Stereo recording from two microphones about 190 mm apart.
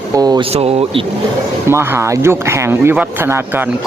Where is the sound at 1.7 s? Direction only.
15° right (ahead or behind).